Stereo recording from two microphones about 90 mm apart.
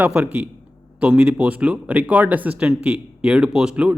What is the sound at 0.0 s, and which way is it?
Speech, 15° right (ahead or behind).